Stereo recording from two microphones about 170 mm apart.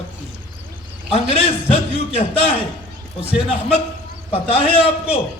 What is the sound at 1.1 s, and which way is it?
A man's voice, 35° left (ahead or behind).